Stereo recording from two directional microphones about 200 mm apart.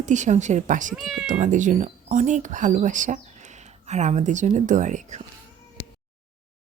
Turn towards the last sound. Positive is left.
turn(degrees=-35)  # may be behind; listen again after turning